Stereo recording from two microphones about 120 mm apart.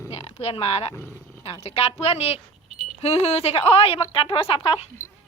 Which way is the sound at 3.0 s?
60° left (ahead or behind).